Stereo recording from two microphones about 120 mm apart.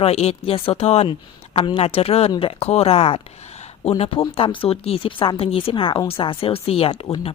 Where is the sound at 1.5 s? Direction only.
50° left (ahead or behind).